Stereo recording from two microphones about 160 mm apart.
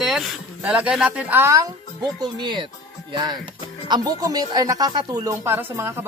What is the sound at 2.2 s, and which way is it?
Speech, 25° right (ahead or behind).